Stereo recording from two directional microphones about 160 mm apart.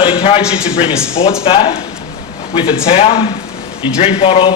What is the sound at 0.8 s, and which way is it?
A man's voice, 35° left (ahead or behind).